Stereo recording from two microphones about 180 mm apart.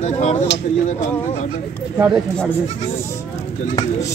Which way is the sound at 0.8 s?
45° left (ahead or behind).